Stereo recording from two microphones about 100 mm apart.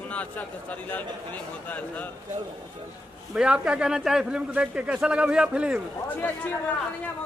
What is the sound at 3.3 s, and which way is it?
A man's voice, 10° right (ahead or behind).